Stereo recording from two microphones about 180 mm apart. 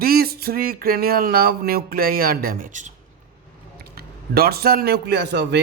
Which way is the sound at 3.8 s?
60° right (ahead or behind).